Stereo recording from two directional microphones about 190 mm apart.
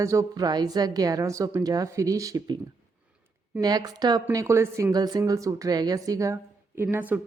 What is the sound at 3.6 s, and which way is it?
A woman's voice, 20° right (ahead or behind).